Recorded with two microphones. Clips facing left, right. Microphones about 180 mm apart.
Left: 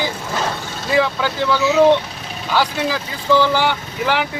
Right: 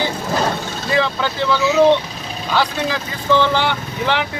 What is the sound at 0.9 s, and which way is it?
A man's voice, 10° left (ahead or behind).